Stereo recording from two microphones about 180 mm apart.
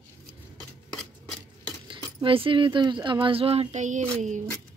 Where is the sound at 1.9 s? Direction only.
30° right (ahead or behind).